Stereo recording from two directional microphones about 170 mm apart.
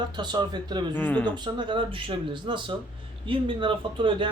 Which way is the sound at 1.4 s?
25° right (ahead or behind).